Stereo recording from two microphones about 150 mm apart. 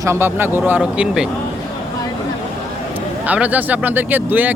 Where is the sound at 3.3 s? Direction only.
10° right (ahead or behind).